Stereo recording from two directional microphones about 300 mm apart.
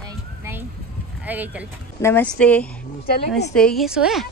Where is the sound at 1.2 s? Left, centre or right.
Centre.